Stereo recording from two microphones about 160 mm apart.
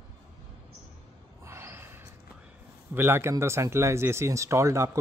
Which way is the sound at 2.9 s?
15° right (ahead or behind).